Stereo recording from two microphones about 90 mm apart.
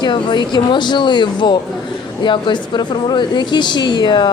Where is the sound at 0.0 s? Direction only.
55° left (ahead or behind).